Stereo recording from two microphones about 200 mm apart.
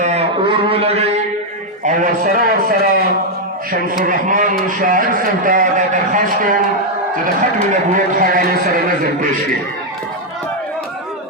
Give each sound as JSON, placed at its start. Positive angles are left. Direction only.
{"t": 0.0, "sound": "a sound", "side_deg": -30}
{"t": 1.8, "sound": "a man's voice", "side_deg": -40}
{"t": 7.7, "sound": "speech", "side_deg": -40}